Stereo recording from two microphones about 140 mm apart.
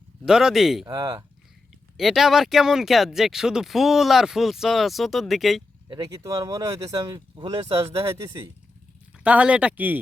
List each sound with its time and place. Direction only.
0.3 s speech: 5° right (ahead or behind)
0.9 s speech: 30° right (ahead or behind)
2.0 s speech: centre (ahead or behind)
5.9 s speech: 25° right (ahead or behind)
9.1 s speech: 10° right (ahead or behind)